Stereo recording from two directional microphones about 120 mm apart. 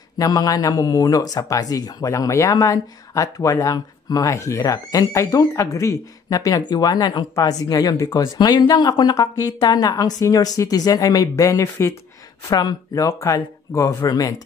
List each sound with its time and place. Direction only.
0.2 s a woman's voice: 30° left (ahead or behind)
8.4 s a woman's voice: 35° left (ahead or behind); by 11.9 s 20° left (ahead or behind)
12.4 s speech: 30° left (ahead or behind)